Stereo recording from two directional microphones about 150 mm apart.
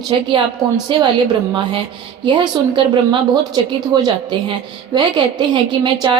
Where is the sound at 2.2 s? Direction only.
30° right (ahead or behind).